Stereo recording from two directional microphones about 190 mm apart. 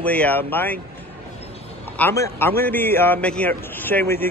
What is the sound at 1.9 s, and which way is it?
A man's voice, 10° left (ahead or behind).